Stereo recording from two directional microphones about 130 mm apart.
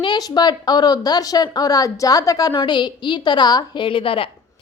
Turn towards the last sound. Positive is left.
turn(degrees=45)  # may be behind; listen again after turning